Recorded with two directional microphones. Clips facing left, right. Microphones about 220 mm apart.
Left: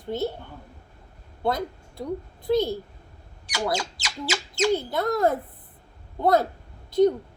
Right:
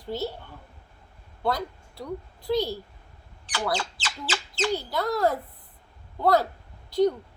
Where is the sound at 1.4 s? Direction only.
20° left (ahead or behind).